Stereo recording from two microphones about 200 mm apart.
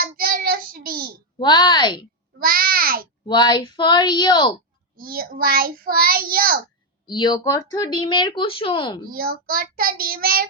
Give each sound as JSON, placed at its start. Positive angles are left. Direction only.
{"t": 0.0, "sound": "child singing", "side_deg": -45}
{"t": 1.4, "sound": "speech", "side_deg": 20}
{"t": 2.4, "sound": "a child's voice", "side_deg": -45}
{"t": 3.2, "sound": "speech", "side_deg": 20}
{"t": 4.9, "sound": "a child's voice", "side_deg": -45}
{"t": 7.1, "sound": "speech", "side_deg": 20}
{"t": 9.0, "sound": "a child's voice", "side_deg": -45}